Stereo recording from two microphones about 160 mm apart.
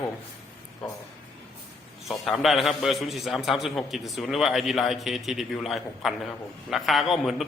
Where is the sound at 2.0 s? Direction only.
Centre (ahead or behind).